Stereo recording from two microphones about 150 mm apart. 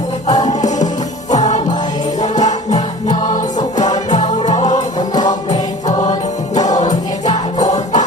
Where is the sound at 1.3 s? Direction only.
50° left (ahead or behind).